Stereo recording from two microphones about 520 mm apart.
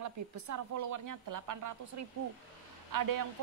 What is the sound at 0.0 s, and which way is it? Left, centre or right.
A woman's voice, right.